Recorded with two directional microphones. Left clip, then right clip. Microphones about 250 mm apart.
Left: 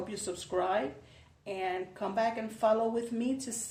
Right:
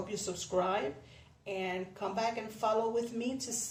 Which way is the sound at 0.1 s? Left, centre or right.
Left.